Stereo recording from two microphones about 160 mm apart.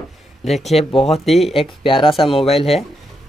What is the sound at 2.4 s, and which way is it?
Speech, 40° left (ahead or behind).